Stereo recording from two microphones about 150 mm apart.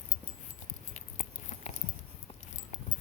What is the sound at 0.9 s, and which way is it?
Biting, 50° left (ahead or behind).